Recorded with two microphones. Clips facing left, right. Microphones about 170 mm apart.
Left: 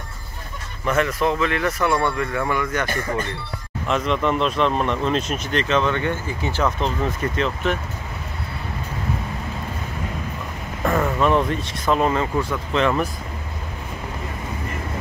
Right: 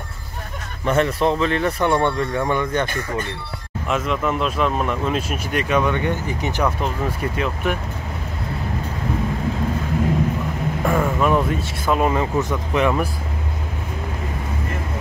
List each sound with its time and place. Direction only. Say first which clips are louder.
0.8 s speech: right 2 dB; 30° right (ahead or behind)
3.8 s speech: left 1 dB; 5° right (ahead or behind)
10.9 s speech: even; 10° right (ahead or behind)